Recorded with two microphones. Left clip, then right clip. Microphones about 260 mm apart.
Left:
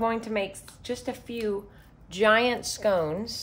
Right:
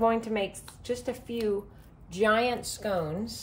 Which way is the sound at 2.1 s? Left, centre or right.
Centre.